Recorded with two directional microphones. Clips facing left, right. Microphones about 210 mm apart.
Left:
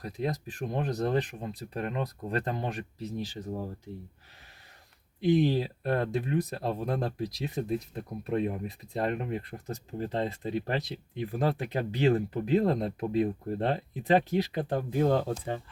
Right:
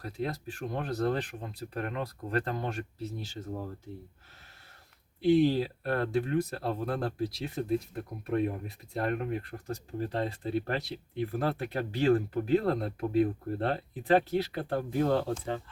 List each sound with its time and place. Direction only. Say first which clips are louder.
0.0 s speech: left 2 dB; 15° left (ahead or behind)
5.2 s speech: right 1 dB; 20° left (ahead or behind)